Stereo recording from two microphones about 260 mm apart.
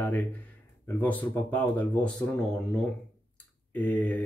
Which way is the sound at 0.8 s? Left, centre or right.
Centre.